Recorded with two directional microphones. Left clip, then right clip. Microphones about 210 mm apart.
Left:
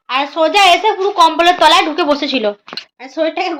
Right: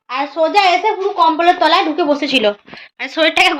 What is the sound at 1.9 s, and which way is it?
A woman's voice, 10° left (ahead or behind).